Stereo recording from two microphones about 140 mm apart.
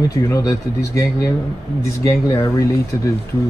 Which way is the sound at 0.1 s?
20° left (ahead or behind).